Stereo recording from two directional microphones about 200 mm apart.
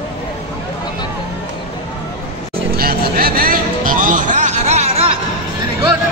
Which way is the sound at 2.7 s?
50° right (ahead or behind).